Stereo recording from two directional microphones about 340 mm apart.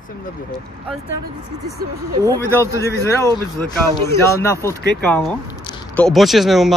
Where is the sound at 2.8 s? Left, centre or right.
Centre.